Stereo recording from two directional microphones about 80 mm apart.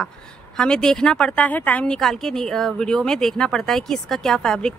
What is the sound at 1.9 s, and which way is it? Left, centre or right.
Speech, centre.